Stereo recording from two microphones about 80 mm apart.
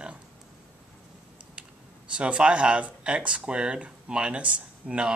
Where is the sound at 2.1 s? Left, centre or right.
Centre.